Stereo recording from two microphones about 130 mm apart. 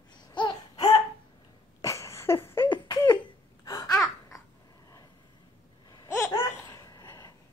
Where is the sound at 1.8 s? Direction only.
25° left (ahead or behind).